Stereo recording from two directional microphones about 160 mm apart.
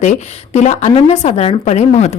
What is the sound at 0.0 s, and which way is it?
A woman's voice, 45° left (ahead or behind).